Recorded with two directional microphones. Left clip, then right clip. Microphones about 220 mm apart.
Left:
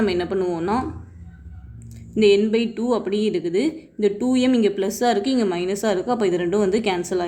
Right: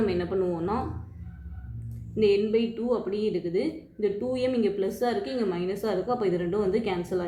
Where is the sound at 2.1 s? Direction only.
50° left (ahead or behind).